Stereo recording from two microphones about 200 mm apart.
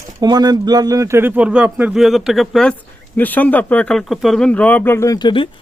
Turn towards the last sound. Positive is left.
turn(degrees=25)  # may be behind; listen again after turning